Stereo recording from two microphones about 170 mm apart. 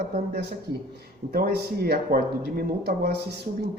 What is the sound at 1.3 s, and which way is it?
Speech, 65° right (ahead or behind).